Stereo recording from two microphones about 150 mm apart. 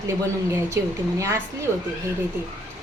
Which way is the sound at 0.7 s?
20° right (ahead or behind).